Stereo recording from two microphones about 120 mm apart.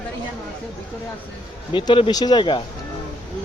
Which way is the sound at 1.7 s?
45° left (ahead or behind).